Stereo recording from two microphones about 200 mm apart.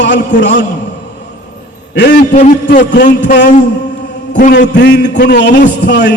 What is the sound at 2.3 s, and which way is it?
Speech, 40° left (ahead or behind).